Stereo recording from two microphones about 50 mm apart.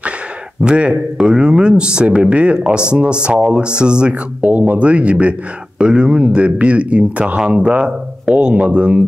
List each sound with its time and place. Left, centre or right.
0.6 s speech: right